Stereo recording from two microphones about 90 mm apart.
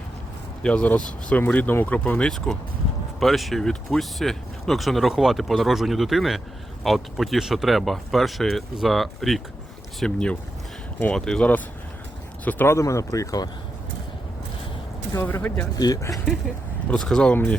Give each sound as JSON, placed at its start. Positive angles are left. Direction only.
{"t": 0.6, "sound": "speech", "side_deg": 15}
{"t": 12.5, "sound": "speech", "side_deg": 20}
{"t": 12.7, "sound": "speech", "side_deg": 35}
{"t": 15.1, "sound": "speech", "side_deg": 25}
{"t": 16.0, "sound": "speech", "side_deg": 35}
{"t": 16.9, "sound": "speech", "side_deg": 5}
{"t": 17.3, "sound": "speech", "side_deg": 15}